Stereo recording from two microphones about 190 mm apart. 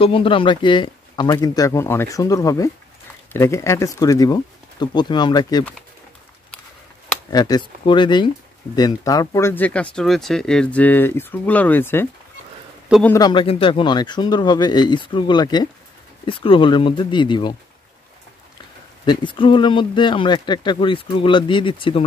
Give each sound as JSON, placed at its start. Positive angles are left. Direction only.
{"t": 0.0, "sound": "speech", "side_deg": 30}
{"t": 7.2, "sound": "speech", "side_deg": 20}
{"t": 13.3, "sound": "speech", "side_deg": 25}
{"t": 19.0, "sound": "speech", "side_deg": 25}